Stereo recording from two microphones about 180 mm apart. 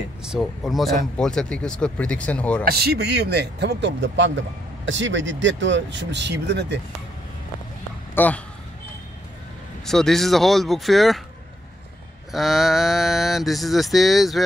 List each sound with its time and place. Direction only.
0.2 s speech: centre (ahead or behind)
2.6 s speech: 60° right (ahead or behind)
8.1 s a man's voice: 10° left (ahead or behind)
9.8 s speech: centre (ahead or behind)
12.3 s speech: centre (ahead or behind)